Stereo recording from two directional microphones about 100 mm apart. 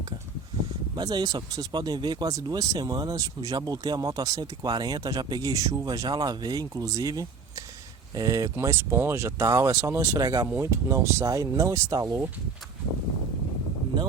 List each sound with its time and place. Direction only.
0.9 s speech: 40° right (ahead or behind)